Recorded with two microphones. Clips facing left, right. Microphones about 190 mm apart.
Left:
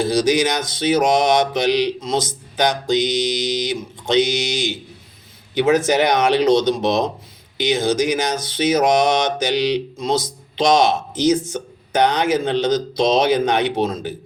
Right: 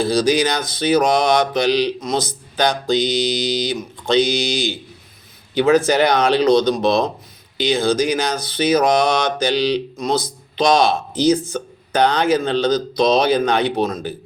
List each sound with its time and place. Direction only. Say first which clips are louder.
0.0 s speech: even; 20° left (ahead or behind)